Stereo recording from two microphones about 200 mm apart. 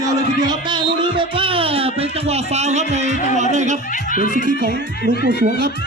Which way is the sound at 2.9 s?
35° right (ahead or behind).